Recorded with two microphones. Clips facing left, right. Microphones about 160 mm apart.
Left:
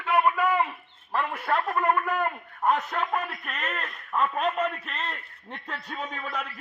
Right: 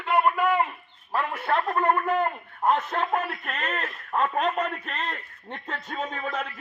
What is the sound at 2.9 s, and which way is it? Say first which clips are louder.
A man's voice: right 2 dB; 35° right (ahead or behind).